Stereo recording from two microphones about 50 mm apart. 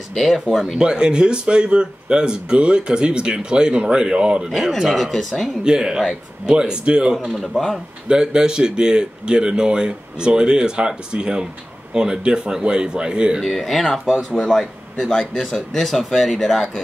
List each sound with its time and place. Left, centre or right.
0.1 s speech: centre
0.7 s speech: centre
4.5 s speech: centre
5.6 s speech: centre
7.3 s speech: centre
8.1 s speech: centre
13.4 s speech: centre